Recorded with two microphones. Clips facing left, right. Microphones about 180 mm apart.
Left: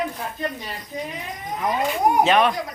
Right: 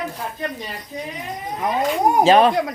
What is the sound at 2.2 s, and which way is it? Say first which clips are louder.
Speech: right 6 dB; 35° right (ahead or behind).